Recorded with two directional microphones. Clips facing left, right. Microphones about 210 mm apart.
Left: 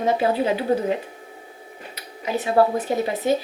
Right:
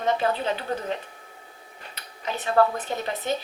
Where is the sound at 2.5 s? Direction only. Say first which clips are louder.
Left 3 dB; 25° left (ahead or behind).